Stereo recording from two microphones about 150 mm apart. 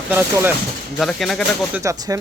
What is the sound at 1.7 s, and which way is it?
Speech, 20° right (ahead or behind).